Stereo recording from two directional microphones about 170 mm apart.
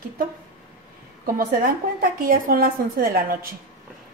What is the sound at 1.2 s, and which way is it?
A woman's voice, 55° right (ahead or behind).